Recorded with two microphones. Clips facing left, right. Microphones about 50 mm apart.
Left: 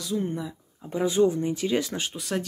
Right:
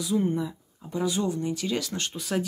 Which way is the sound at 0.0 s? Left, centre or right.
Centre.